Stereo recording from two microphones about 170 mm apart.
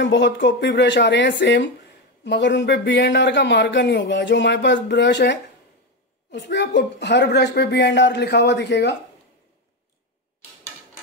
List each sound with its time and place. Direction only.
0.0 s speech: 90° left